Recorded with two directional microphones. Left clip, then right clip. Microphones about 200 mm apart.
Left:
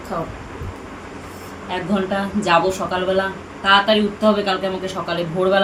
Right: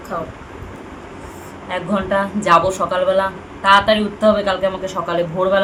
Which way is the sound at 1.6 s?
15° right (ahead or behind).